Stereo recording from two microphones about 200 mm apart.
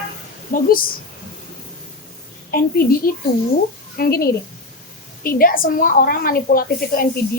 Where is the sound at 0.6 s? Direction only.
45° left (ahead or behind).